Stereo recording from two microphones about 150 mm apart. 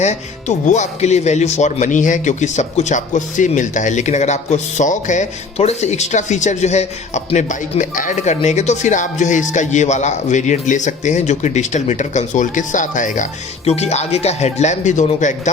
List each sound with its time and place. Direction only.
0.0 s speech: 50° left (ahead or behind)
13.7 s speech: 45° left (ahead or behind)